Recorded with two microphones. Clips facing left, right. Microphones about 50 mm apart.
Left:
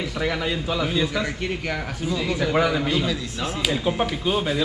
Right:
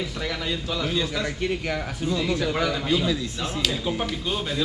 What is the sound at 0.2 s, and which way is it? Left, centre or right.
Speech, centre.